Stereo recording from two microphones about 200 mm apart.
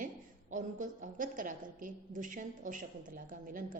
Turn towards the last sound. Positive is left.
turn(degrees=-45)  # may be behind; listen again after turning